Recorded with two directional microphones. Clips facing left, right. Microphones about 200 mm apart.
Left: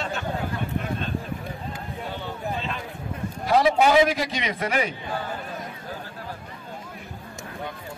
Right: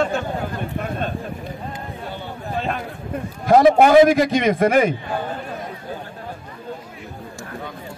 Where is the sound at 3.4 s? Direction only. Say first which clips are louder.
Right 7 dB; 50° right (ahead or behind).